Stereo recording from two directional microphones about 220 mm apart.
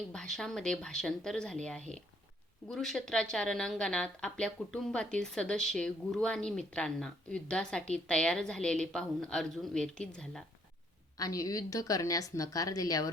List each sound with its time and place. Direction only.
0.1 s a woman's voice: centre (ahead or behind)
2.6 s a woman's voice: centre (ahead or behind)
11.2 s a woman's voice: 15° left (ahead or behind)